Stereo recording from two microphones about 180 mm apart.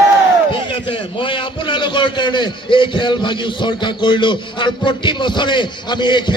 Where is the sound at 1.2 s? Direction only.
30° left (ahead or behind).